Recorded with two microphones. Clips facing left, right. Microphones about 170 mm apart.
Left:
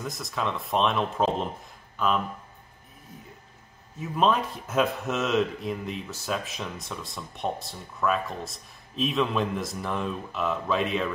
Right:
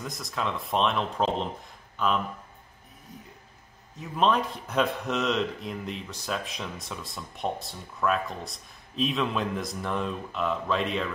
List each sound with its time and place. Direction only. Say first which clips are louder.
0.0 s speech: left 1 dB; centre (ahead or behind)
4.0 s speech: left 1 dB; centre (ahead or behind)